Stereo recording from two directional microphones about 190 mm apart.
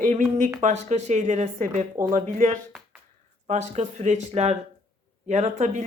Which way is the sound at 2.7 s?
5° right (ahead or behind).